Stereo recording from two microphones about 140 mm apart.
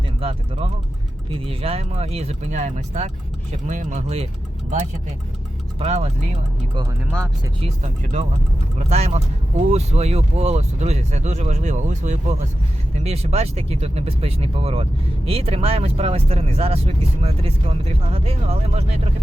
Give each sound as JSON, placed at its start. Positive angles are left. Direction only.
{"t": 0.2, "sound": "speech", "side_deg": -40}
{"t": 5.8, "sound": "speech", "side_deg": -50}
{"t": 7.6, "sound": "speech", "side_deg": -50}